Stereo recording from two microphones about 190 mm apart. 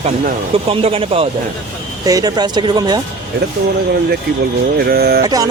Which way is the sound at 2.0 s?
20° right (ahead or behind).